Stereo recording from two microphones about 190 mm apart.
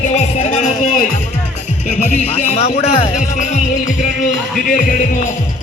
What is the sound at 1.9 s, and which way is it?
Speech, 35° left (ahead or behind).